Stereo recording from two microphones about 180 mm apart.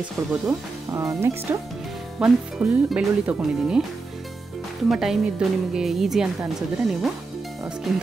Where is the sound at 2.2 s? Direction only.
5° right (ahead or behind).